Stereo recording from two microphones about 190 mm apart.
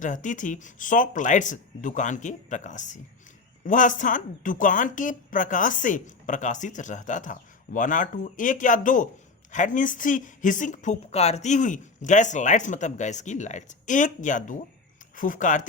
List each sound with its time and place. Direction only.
0.0 s a woman's voice: 40° left (ahead or behind)